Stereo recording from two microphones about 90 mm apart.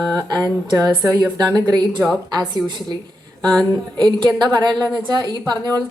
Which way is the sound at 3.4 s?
10° left (ahead or behind).